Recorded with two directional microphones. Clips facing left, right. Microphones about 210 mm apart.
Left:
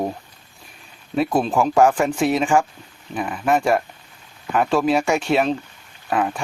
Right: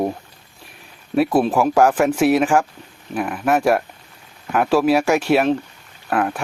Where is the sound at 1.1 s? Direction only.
5° right (ahead or behind).